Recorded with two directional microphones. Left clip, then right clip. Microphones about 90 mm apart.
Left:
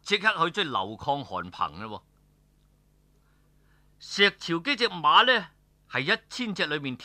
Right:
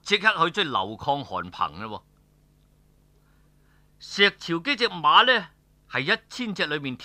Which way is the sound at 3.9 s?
40° right (ahead or behind).